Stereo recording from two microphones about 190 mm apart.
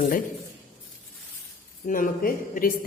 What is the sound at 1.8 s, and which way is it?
Speech, 45° left (ahead or behind).